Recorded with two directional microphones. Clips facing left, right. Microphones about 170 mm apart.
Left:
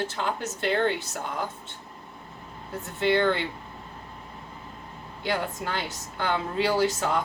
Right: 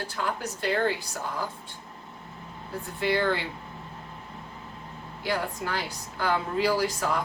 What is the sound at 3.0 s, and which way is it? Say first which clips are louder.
Speech: left 3 dB; 25° left (ahead or behind).